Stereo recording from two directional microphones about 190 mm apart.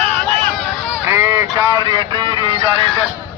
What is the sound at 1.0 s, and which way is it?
Honk, 15° right (ahead or behind).